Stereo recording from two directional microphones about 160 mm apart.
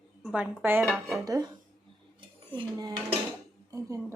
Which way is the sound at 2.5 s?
30° right (ahead or behind).